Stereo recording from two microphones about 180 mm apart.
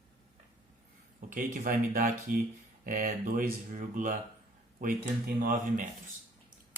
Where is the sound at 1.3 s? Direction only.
50° right (ahead or behind).